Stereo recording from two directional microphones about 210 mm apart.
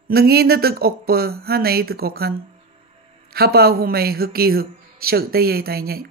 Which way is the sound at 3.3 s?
50° right (ahead or behind).